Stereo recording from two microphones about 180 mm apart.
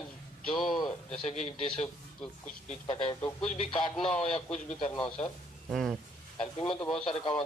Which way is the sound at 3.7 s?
30° left (ahead or behind).